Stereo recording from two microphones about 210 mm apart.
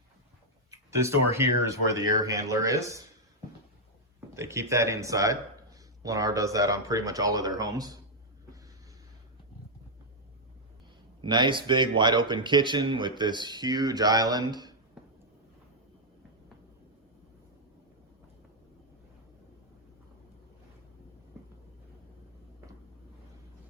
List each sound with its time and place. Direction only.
0.7 s speech: 15° right (ahead or behind)
4.4 s speech: 15° right (ahead or behind)
11.2 s speech: 20° right (ahead or behind)